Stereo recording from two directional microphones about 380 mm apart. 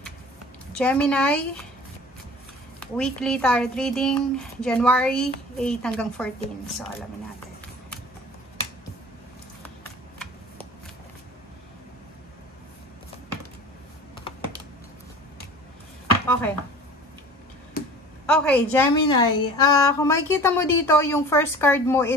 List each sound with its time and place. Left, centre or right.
0.7 s a woman's voice: centre
3.0 s a woman's voice: centre
16.3 s speech: centre
17.8 s a sound: left
18.2 s a woman's voice: centre